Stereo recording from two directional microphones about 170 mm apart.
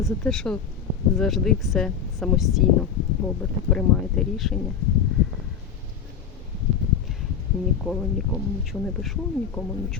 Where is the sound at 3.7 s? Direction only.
Centre (ahead or behind).